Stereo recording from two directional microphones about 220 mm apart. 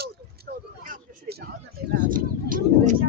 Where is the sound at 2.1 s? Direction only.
40° right (ahead or behind).